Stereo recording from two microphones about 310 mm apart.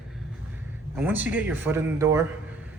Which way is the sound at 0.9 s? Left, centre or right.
Centre.